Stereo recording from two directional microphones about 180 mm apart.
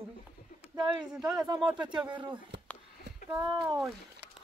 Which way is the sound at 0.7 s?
25° right (ahead or behind).